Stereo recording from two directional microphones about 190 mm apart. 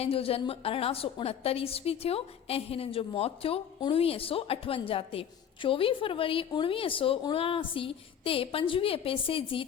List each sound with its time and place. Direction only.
0.0 s a woman's voice: 30° left (ahead or behind)